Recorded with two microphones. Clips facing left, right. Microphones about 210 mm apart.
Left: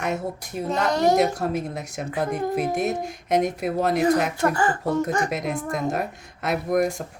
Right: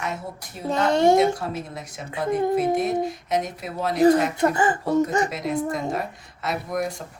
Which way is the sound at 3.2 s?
55° left (ahead or behind).